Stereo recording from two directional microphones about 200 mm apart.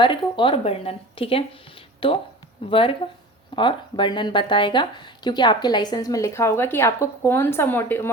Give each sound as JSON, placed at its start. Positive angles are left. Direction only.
{"t": 0.0, "sound": "speech", "side_deg": 25}